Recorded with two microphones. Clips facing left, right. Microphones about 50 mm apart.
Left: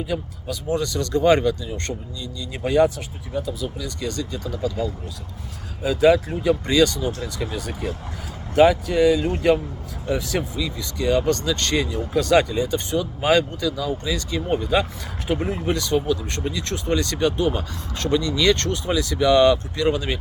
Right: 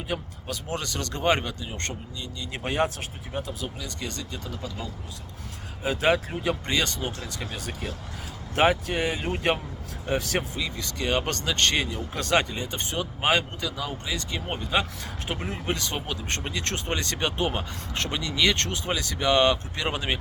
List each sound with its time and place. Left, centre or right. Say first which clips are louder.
0.1 s speech: left 4 dB; right
3.8 s speech: left 7 dB; right
10.1 s speech: left 3 dB; right
15.7 s speech: left 9 dB; right
18.5 s speech: left 6 dB; right